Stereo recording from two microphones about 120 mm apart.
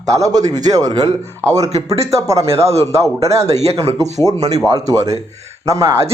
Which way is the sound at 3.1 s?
60° right (ahead or behind).